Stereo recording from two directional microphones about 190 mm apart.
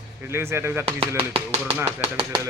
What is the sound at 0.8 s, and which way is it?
Speech, 30° right (ahead or behind).